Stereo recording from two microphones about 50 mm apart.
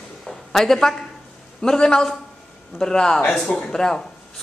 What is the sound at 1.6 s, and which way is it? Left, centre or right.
A man's voice, centre.